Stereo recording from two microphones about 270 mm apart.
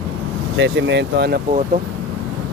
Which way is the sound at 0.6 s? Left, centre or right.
Right.